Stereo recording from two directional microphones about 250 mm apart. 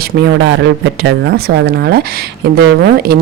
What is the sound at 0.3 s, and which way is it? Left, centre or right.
A woman's voice, right.